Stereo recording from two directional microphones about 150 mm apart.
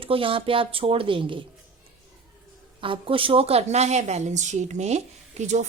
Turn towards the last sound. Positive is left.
turn(degrees=-50)  # may be behind; listen again after turning